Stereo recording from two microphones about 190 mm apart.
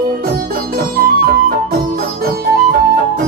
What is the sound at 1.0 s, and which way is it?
Music, 50° right (ahead or behind).